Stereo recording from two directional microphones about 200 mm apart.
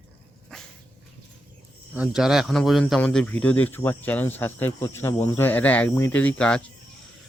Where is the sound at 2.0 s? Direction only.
Centre (ahead or behind).